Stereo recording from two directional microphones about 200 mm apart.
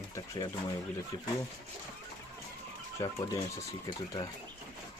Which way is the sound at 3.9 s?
20° left (ahead or behind).